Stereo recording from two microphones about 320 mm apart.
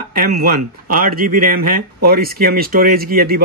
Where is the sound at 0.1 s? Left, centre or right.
Right.